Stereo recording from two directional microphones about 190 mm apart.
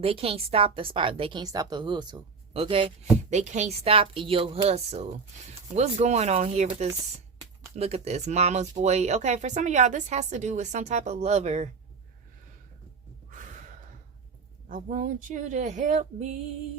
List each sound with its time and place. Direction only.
0.0 s a woman's voice: 30° right (ahead or behind)
14.7 s speech: 45° right (ahead or behind)